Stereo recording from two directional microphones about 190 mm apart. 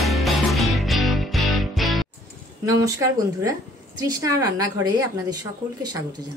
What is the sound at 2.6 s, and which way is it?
Speech, 15° right (ahead or behind).